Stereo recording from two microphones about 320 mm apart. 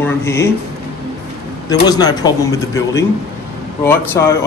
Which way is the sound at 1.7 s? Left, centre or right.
Centre.